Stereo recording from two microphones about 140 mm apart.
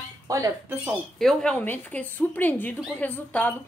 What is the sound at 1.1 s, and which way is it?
A woman's voice, 5° left (ahead or behind).